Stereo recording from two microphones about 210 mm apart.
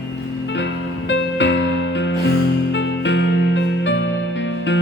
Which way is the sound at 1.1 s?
60° left (ahead or behind).